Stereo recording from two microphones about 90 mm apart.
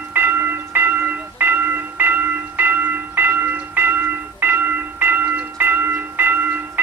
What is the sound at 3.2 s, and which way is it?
Train, 25° right (ahead or behind).